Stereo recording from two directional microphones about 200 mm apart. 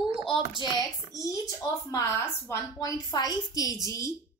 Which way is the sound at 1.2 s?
15° left (ahead or behind).